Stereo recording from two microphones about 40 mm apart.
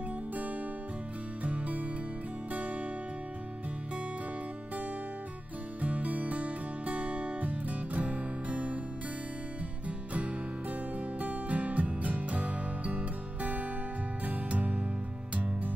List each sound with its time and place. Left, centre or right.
1.4 s music: right
5.8 s music: right
9.8 s music: right